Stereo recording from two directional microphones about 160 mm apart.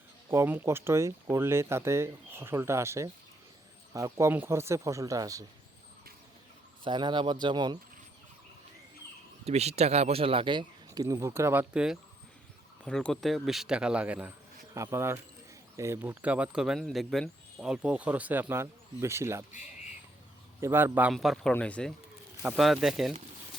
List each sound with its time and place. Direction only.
0.3 s speech: 15° right (ahead or behind)
6.8 s speech: 30° right (ahead or behind)
9.5 s speech: 40° right (ahead or behind); by 11.6 s 15° right (ahead or behind)
11.7 s a man's voice: 5° right (ahead or behind)
20.6 s speech: 15° right (ahead or behind)
21.1 s a man's voice: centre (ahead or behind)